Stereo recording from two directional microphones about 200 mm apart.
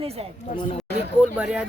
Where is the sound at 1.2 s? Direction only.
5° right (ahead or behind).